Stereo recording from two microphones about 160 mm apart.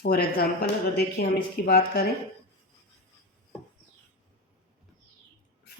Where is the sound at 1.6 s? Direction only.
75° left (ahead or behind).